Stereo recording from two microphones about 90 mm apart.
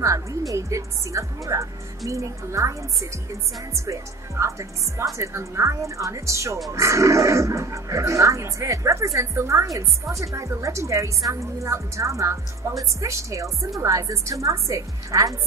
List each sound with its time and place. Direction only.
0.0 s speech: 35° right (ahead or behind)